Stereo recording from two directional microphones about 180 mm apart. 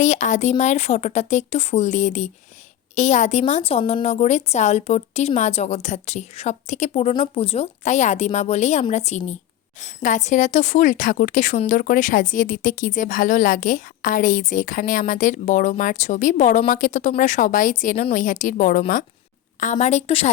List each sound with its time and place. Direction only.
0.0 s a woman's voice: 45° left (ahead or behind)